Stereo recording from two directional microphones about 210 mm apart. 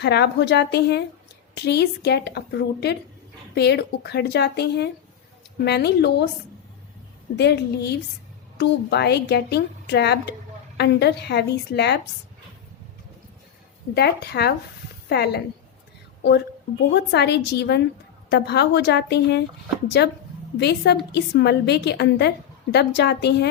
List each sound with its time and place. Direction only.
0.0 s a woman's voice: 50° left (ahead or behind)
7.3 s a woman's voice: 50° left (ahead or behind)
13.9 s a woman's voice: 50° left (ahead or behind)
16.9 s a woman's voice: 55° left (ahead or behind)